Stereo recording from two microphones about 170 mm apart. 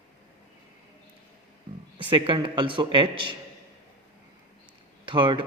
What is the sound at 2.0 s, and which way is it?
A man's voice, 25° right (ahead or behind).